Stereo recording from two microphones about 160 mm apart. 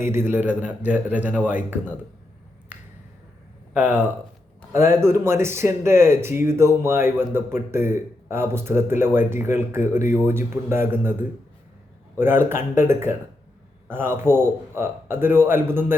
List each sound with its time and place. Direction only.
0.0 s speech: 15° right (ahead or behind)
3.8 s speech: 10° right (ahead or behind)